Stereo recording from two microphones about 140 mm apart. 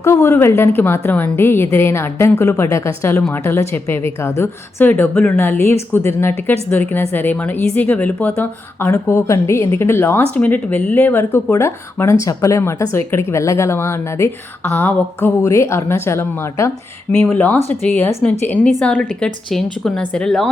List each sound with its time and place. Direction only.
0.0 s a woman's voice: 20° left (ahead or behind)
17.1 s a woman's voice: 10° left (ahead or behind)